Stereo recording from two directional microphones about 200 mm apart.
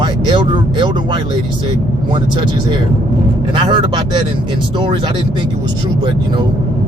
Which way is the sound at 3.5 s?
25° right (ahead or behind).